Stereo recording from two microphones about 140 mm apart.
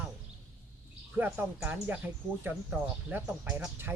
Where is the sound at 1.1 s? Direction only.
15° right (ahead or behind).